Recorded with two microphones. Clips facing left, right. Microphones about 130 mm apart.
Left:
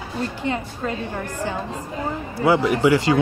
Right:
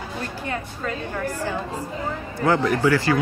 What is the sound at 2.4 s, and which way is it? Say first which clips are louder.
Speech: left 2 dB; 15° left (ahead or behind).